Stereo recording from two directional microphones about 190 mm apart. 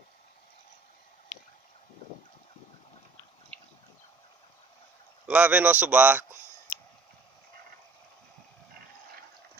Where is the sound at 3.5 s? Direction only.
35° right (ahead or behind).